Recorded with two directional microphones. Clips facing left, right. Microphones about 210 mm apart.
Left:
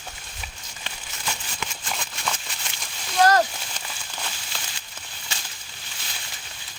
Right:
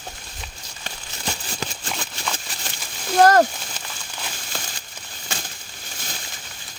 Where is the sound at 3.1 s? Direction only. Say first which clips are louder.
Right 4 dB; 50° right (ahead or behind).